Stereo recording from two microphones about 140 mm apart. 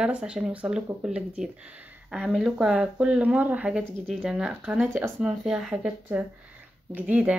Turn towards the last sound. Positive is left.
turn(degrees=-10)  # may be behind; listen again after turning